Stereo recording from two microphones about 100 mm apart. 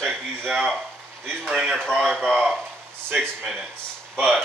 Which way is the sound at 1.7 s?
5° left (ahead or behind).